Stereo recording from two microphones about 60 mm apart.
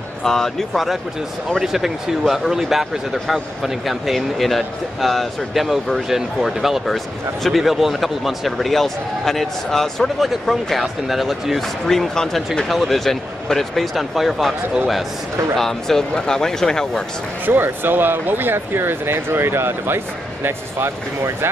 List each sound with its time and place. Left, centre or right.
0.2 s speech: centre
15.5 s speech: centre
17.5 s speech: right